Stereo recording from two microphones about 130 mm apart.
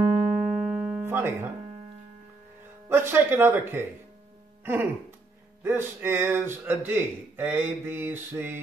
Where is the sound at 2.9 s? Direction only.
15° right (ahead or behind).